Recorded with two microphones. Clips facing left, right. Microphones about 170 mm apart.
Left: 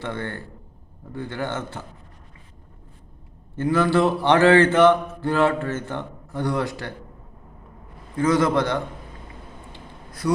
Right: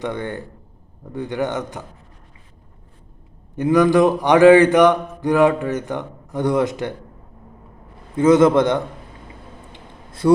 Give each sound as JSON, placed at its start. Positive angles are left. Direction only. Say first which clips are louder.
{"t": 0.0, "sound": "mantra", "louder": "right 4 dB", "side_deg": -15}
{"t": 3.5, "sound": "mantra", "louder": "right 5 dB", "side_deg": -15}
{"t": 8.1, "sound": "a man's voice", "louder": "right 7 dB", "side_deg": -20}
{"t": 9.7, "sound": "a sound", "louder": "right 1 dB", "side_deg": -25}